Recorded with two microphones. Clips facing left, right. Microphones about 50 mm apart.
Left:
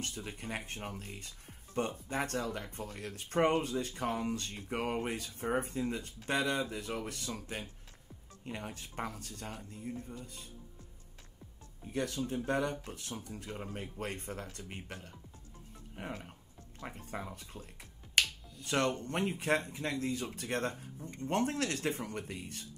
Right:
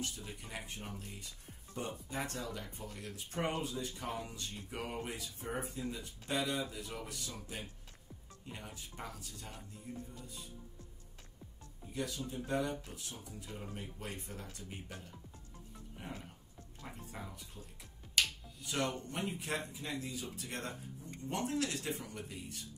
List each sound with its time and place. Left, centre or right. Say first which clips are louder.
0.0 s speech: left 3 dB; left
11.8 s speech: left 5 dB; left
18.2 s finger snapping: left 3 dB; left
18.7 s speech: left 5 dB; left